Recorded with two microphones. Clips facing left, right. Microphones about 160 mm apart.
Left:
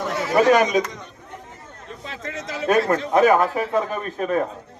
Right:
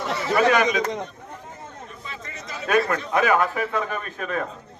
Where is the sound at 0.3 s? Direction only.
40° left (ahead or behind).